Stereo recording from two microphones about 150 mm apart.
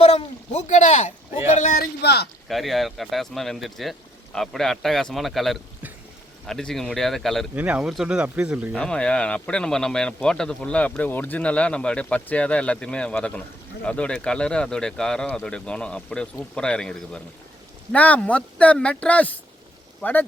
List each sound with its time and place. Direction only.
0.0 s a man's voice: 45° left (ahead or behind)
1.8 s speech: 90° left
2.5 s speech: centre (ahead or behind)
7.5 s speech: 10° right (ahead or behind)
8.7 s speech: 5° left (ahead or behind)